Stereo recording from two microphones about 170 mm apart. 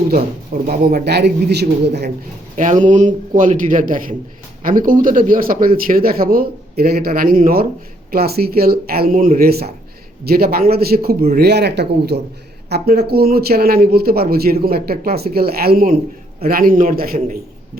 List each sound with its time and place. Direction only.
0.1 s speech: 60° right (ahead or behind)
2.6 s a man's voice: 45° right (ahead or behind); by 11.3 s 60° right (ahead or behind)
11.3 s speech: 75° right (ahead or behind); by 17.3 s 55° right (ahead or behind)